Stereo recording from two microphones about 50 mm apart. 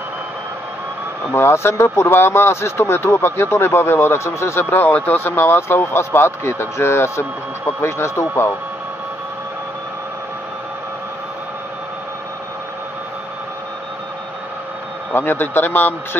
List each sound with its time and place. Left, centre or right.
1.4 s speech: left
4.6 s a man's voice: left
15.1 s a man's voice: left